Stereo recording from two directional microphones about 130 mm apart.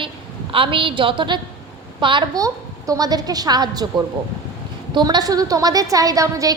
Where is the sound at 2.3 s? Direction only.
25° right (ahead or behind).